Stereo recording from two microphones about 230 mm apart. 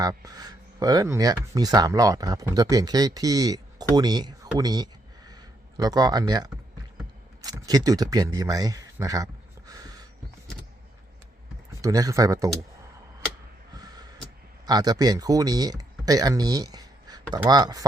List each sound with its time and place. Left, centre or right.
0.0 s speech: centre
11.7 s speech: centre
14.7 s speech: centre